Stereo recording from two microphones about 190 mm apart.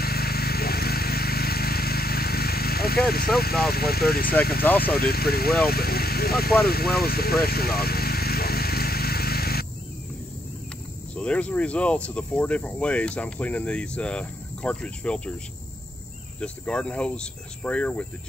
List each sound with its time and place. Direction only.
0.0 s a sound: 55° left (ahead or behind)
3.6 s speech: 55° left (ahead or behind)
6.6 s vehicle: 55° left (ahead or behind)
11.1 s speech: 5° left (ahead or behind)
16.3 s speech: 5° left (ahead or behind)